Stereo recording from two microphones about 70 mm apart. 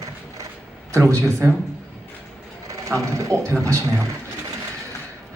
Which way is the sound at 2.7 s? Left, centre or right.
Right.